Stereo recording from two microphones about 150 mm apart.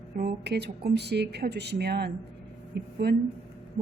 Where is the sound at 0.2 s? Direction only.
90° right.